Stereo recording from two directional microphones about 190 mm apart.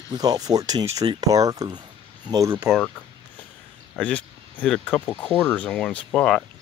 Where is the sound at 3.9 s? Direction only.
5° left (ahead or behind).